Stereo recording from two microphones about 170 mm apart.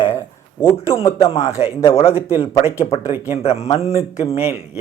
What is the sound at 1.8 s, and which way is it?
Speech, 35° left (ahead or behind).